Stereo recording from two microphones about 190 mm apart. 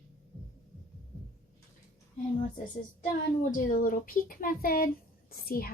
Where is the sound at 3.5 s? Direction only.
45° left (ahead or behind).